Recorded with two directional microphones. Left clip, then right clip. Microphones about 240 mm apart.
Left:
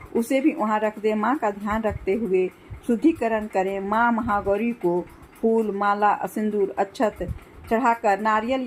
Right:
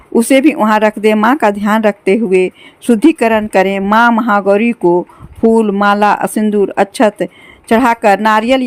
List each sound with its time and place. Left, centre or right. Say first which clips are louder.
0.1 s a woman's voice: right 13 dB; right